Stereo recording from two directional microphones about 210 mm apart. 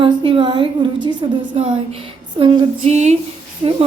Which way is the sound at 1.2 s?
25° right (ahead or behind).